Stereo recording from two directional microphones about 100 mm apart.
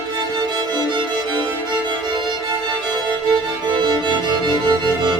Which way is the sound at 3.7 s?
50° right (ahead or behind).